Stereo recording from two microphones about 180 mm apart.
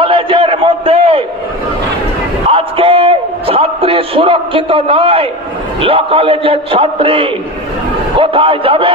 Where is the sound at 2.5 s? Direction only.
30° right (ahead or behind).